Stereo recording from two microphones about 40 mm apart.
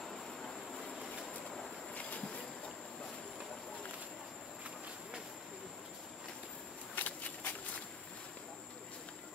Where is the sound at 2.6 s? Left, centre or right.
Centre.